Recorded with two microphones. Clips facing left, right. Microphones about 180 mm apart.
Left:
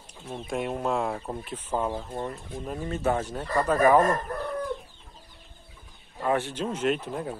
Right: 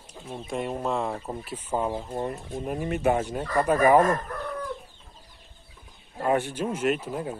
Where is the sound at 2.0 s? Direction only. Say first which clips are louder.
Right 3 dB; 20° right (ahead or behind).